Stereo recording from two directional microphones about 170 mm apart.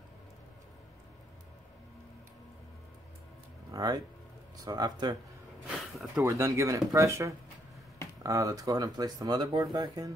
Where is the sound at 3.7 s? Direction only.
20° right (ahead or behind).